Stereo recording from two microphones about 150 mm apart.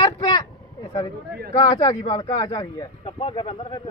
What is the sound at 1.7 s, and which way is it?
Speech, 30° left (ahead or behind).